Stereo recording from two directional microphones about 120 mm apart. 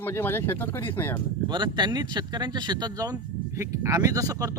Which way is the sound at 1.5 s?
40° right (ahead or behind).